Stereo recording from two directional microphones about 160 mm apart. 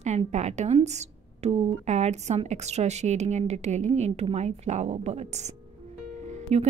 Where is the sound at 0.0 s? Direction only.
45° right (ahead or behind).